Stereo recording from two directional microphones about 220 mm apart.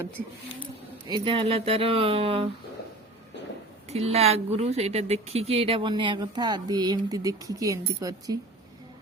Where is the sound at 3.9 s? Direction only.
30° right (ahead or behind).